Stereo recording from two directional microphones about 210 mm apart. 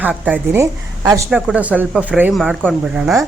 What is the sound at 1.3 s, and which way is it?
Speech, 5° right (ahead or behind).